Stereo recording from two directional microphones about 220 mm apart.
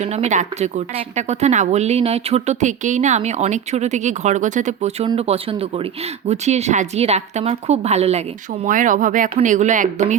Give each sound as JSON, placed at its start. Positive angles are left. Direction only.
{"t": 0.0, "sound": "speech", "side_deg": -30}